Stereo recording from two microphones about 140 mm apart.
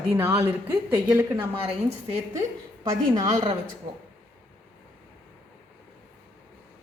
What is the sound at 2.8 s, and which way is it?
Speech, 25° right (ahead or behind).